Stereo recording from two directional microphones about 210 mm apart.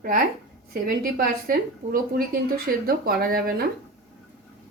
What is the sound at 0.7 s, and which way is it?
A woman's voice, 45° right (ahead or behind).